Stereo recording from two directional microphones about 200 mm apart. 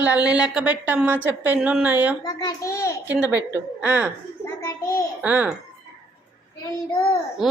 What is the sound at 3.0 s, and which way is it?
A woman's voice, 10° right (ahead or behind).